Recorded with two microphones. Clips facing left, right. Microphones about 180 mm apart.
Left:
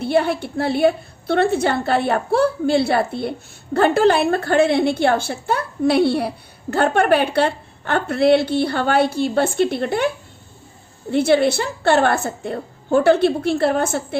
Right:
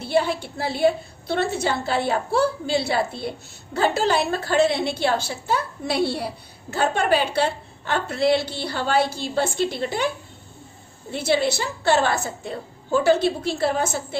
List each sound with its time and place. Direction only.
0.0 s a woman's voice: 60° left (ahead or behind)
11.1 s a woman's voice: 55° left (ahead or behind)